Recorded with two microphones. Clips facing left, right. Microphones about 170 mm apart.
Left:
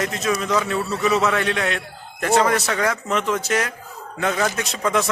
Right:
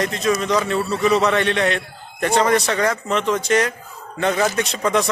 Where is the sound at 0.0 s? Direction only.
5° left (ahead or behind).